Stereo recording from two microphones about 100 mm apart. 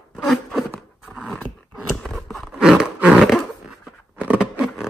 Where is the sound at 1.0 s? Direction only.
10° right (ahead or behind).